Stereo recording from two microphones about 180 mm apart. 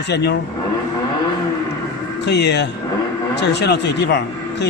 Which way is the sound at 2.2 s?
70° left (ahead or behind).